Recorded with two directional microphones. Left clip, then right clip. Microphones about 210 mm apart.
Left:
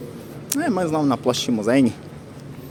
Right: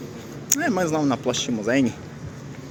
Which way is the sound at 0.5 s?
15° left (ahead or behind).